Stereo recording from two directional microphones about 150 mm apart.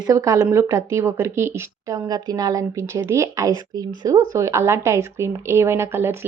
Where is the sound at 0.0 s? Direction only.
20° right (ahead or behind).